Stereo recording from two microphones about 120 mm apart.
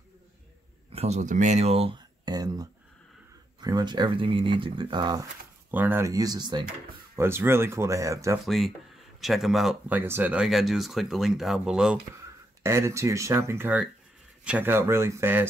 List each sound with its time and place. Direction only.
0.9 s speech: 65° right (ahead or behind)
2.0 s speech: 35° right (ahead or behind)
5.7 s speech: 15° right (ahead or behind)
6.1 s speech: 35° right (ahead or behind)
7.2 s speech: 20° right (ahead or behind)
8.5 s speech: centre (ahead or behind)
9.8 s speech: 15° right (ahead or behind)
10.4 s speech: centre (ahead or behind)
12.6 s speech: 25° right (ahead or behind)